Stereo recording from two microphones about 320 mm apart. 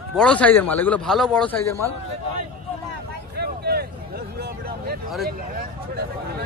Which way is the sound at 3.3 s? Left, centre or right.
Right.